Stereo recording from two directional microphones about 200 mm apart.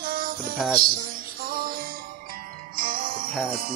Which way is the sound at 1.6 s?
45° right (ahead or behind).